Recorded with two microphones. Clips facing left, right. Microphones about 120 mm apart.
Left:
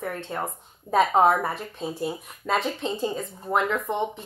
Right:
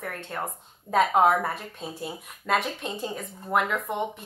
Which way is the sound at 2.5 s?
15° left (ahead or behind).